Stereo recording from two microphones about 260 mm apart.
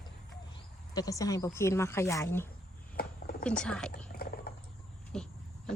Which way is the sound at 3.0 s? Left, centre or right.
Left.